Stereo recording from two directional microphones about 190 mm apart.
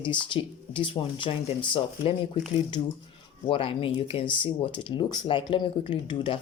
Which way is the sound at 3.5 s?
30° left (ahead or behind).